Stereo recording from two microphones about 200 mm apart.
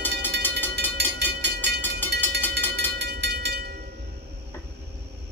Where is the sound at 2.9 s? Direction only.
55° right (ahead or behind).